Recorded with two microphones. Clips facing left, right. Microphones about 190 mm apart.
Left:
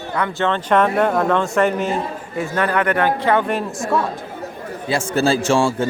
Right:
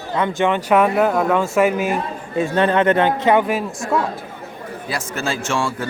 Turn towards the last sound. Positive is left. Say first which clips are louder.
# left 5 dB
turn(degrees=30)  # may be behind; listen again after turning